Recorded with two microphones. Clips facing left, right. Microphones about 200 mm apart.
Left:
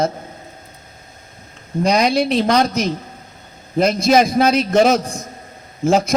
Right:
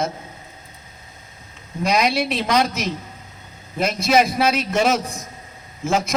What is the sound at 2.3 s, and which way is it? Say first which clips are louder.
Speech: left 5 dB; 40° left (ahead or behind).